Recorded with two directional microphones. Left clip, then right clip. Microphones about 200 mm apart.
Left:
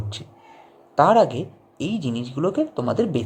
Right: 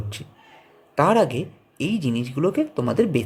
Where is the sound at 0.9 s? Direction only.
90° right.